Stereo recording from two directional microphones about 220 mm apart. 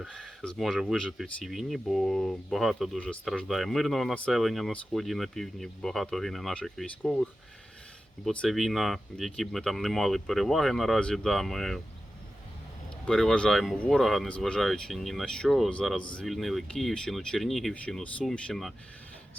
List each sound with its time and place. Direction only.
0.0 s speech: centre (ahead or behind)
13.1 s speech: centre (ahead or behind)